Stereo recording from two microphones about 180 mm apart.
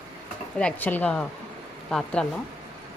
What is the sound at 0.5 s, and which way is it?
Speech, 10° left (ahead or behind).